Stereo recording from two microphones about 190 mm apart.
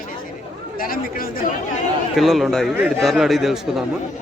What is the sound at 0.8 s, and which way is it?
Speech, 50° left (ahead or behind).